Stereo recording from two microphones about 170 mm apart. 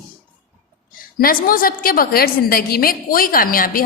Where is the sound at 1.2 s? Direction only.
55° left (ahead or behind).